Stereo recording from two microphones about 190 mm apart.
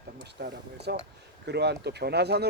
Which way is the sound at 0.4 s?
60° right (ahead or behind).